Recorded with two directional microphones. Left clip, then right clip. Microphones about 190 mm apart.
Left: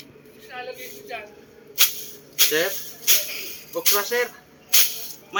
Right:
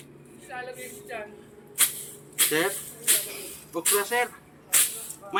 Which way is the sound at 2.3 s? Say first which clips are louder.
Left 4 dB; 15° right (ahead or behind).